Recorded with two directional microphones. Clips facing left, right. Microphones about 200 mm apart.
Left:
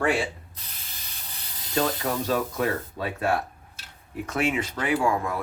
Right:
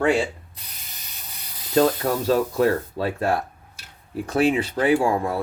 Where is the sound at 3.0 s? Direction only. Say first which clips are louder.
Right 1 dB; 30° right (ahead or behind).